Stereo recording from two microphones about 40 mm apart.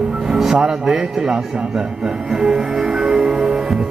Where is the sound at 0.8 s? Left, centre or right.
Centre.